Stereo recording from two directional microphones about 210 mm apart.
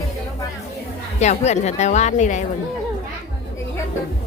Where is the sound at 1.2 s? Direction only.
30° left (ahead or behind).